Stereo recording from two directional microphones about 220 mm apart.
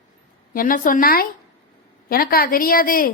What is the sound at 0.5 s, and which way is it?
A woman's voice, 40° left (ahead or behind).